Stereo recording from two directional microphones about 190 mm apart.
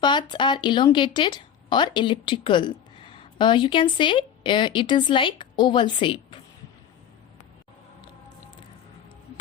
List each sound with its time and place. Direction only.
0.0 s speech: 25° left (ahead or behind)